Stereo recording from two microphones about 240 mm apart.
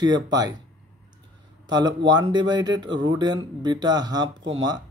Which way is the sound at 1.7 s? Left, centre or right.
Centre.